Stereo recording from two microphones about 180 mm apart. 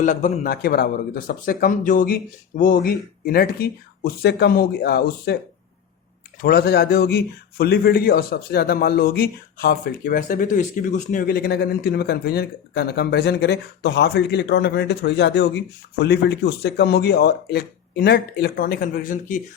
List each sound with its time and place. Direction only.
0.0 s a man's voice: 45° left (ahead or behind); by 5.4 s 60° left (ahead or behind)
6.4 s a man's voice: 60° left (ahead or behind)